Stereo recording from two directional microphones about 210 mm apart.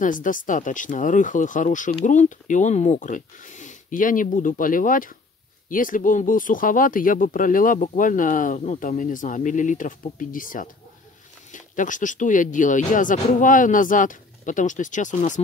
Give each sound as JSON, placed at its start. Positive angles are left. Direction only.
{"t": 0.0, "sound": "speech", "side_deg": 40}